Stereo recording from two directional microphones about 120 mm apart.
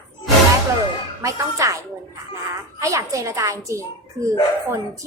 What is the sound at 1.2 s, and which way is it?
Speech, 25° right (ahead or behind).